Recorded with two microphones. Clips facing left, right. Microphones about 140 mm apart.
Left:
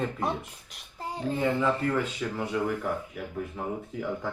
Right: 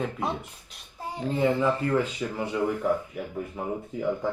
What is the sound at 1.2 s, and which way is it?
Speech, 15° right (ahead or behind).